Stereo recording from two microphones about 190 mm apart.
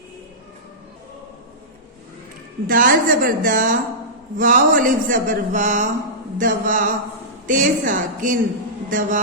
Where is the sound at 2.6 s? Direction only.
45° right (ahead or behind).